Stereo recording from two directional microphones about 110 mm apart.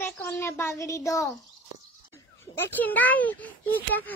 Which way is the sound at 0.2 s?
20° left (ahead or behind).